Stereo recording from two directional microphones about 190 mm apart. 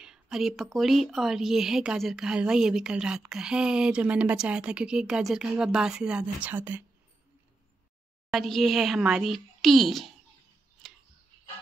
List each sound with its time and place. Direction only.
0.0 s speech: 5° right (ahead or behind)
8.3 s speech: centre (ahead or behind)